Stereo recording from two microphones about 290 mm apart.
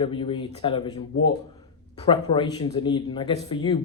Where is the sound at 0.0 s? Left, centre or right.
Centre.